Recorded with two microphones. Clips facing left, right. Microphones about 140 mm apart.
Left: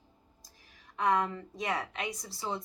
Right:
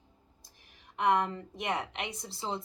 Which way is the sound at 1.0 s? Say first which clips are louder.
Right 1 dB; 25° right (ahead or behind).